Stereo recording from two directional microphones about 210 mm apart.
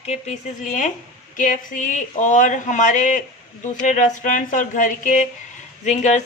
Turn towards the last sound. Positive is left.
turn(degrees=35)  # may be behind; listen again after turning